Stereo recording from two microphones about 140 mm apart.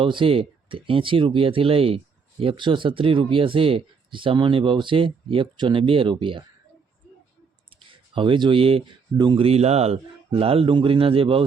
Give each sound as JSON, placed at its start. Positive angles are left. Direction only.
{"t": 0.0, "sound": "speech", "side_deg": -40}
{"t": 7.8, "sound": "speech", "side_deg": -40}
{"t": 9.5, "sound": "speech", "side_deg": -50}